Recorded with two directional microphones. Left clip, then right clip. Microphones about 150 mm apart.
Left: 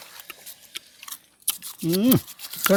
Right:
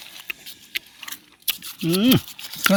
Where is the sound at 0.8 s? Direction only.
20° left (ahead or behind).